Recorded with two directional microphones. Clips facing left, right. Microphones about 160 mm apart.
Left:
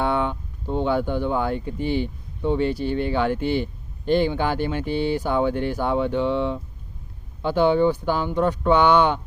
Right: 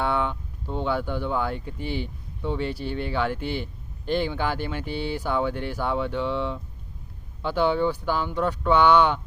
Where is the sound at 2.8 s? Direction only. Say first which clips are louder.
Left 6 dB; 50° left (ahead or behind).